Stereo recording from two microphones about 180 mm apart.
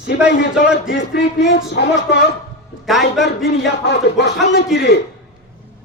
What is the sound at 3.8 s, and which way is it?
Speech, 70° left (ahead or behind).